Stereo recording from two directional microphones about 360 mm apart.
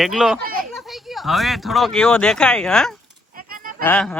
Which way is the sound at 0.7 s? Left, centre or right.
Centre.